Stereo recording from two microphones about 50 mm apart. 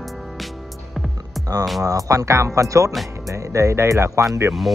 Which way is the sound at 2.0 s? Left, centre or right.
Right.